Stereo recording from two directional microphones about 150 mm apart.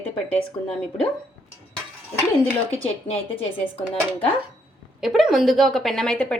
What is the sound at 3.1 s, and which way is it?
Speech, 40° left (ahead or behind).